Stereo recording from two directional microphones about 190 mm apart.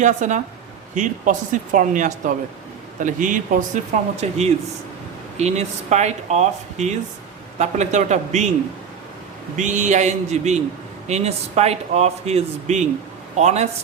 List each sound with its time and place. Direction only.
0.0 s speech: 40° right (ahead or behind)
9.6 s speech: 40° right (ahead or behind)